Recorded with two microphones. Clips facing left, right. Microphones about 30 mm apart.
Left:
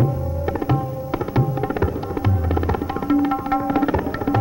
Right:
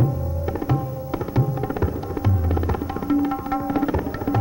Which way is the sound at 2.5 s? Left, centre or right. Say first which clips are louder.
Left 3 dB; centre.